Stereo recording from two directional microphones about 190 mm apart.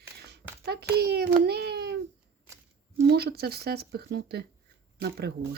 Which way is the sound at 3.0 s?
55° right (ahead or behind).